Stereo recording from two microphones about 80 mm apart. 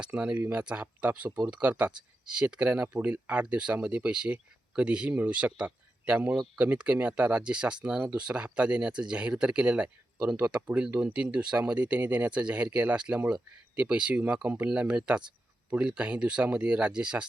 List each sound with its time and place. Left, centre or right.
0.0 s speech: centre